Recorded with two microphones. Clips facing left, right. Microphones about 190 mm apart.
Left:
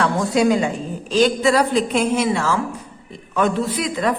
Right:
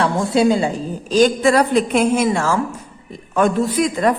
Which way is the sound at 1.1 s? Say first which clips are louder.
Right 2 dB; 45° right (ahead or behind).